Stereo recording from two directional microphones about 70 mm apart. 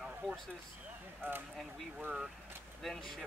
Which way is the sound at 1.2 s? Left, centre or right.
Right.